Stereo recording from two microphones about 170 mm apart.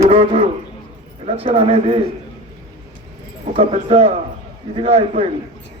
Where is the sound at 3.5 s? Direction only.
35° right (ahead or behind).